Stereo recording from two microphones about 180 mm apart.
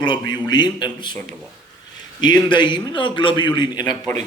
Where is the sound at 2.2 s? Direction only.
25° left (ahead or behind).